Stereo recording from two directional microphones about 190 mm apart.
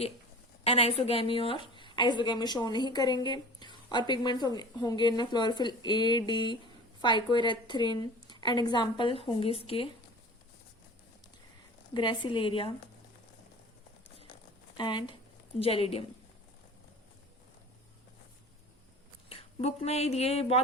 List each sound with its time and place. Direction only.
0.6 s a woman's voice: 30° left (ahead or behind)
11.9 s a woman's voice: 25° left (ahead or behind)
14.8 s a woman's voice: 25° left (ahead or behind)
19.3 s speech: 30° left (ahead or behind)